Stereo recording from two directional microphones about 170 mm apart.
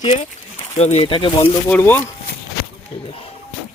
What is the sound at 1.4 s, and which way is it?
Speech, 10° left (ahead or behind).